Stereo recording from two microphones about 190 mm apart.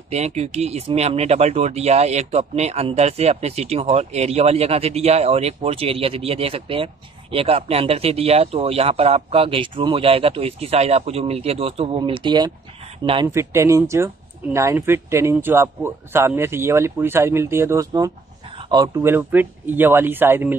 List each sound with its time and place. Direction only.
0.1 s speech: 35° right (ahead or behind)
13.3 s speech: 15° right (ahead or behind)